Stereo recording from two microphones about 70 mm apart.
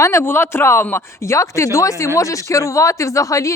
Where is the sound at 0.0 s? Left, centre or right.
Left.